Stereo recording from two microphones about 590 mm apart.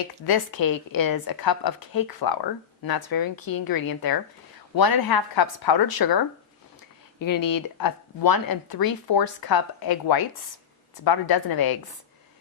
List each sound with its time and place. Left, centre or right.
0.3 s speech: left